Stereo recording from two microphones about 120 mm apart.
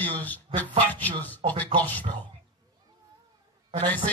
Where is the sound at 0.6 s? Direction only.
15° left (ahead or behind).